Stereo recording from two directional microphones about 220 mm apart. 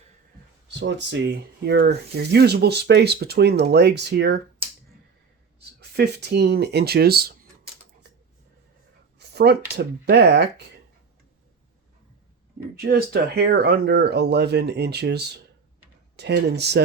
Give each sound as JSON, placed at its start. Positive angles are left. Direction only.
{"t": 0.7, "sound": "speech", "side_deg": -50}
{"t": 5.5, "sound": "speech", "side_deg": -50}
{"t": 9.1, "sound": "speech", "side_deg": -45}
{"t": 12.8, "sound": "speech", "side_deg": -45}